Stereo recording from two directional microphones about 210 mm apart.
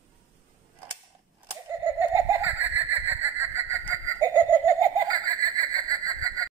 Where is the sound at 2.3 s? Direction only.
10° right (ahead or behind).